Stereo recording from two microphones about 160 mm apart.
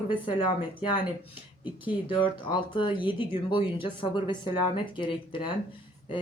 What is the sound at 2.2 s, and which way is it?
Speech, 30° left (ahead or behind).